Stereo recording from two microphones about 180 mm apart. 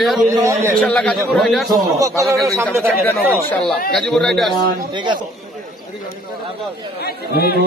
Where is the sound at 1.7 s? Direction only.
15° right (ahead or behind).